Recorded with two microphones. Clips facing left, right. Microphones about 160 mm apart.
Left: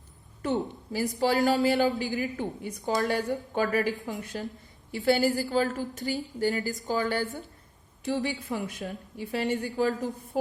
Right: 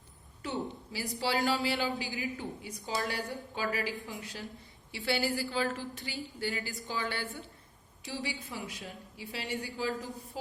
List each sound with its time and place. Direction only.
0.4 s a woman's voice: 50° left (ahead or behind)